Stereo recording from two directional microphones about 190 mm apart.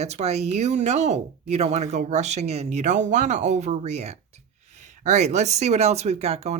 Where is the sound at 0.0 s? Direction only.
35° right (ahead or behind).